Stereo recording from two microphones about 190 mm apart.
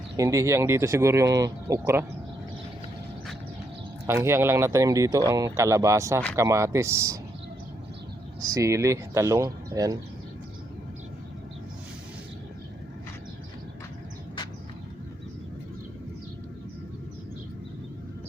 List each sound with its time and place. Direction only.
0.2 s speech: 15° right (ahead or behind)
4.0 s speech: 15° right (ahead or behind)
8.4 s speech: 20° right (ahead or behind)